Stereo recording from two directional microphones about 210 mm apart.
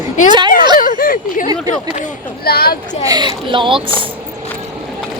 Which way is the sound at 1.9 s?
40° left (ahead or behind).